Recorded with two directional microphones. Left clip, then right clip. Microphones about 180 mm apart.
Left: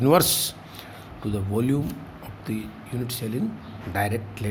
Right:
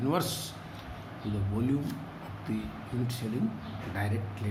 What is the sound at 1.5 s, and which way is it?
Speech, 60° left (ahead or behind).